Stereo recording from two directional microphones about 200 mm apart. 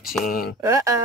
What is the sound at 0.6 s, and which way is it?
Speech, 15° right (ahead or behind).